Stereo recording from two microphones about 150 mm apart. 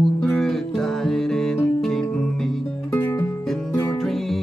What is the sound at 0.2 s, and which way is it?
Music, 5° left (ahead or behind).